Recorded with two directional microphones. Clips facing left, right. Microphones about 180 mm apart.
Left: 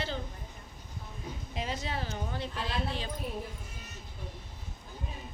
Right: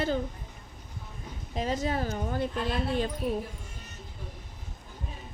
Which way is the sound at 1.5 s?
40° right (ahead or behind).